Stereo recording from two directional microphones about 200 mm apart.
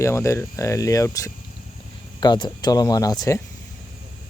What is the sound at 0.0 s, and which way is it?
Speech, 15° left (ahead or behind).